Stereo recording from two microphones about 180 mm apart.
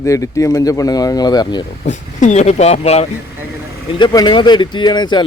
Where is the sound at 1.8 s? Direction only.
40° left (ahead or behind).